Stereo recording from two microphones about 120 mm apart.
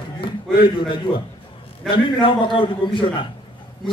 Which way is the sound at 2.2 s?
40° left (ahead or behind).